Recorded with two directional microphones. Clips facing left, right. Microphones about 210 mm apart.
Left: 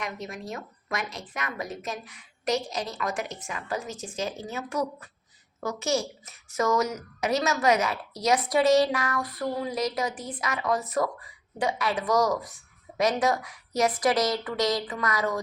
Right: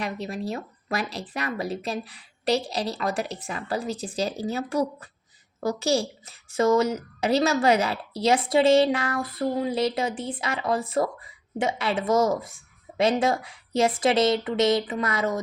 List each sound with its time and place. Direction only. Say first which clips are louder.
0.0 s a woman's voice: right 5 dB; 30° right (ahead or behind)